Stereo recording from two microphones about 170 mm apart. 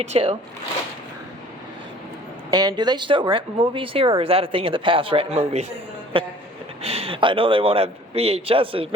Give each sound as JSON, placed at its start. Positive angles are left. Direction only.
{"t": 0.0, "sound": "speech", "side_deg": -35}
{"t": 2.5, "sound": "speech", "side_deg": -25}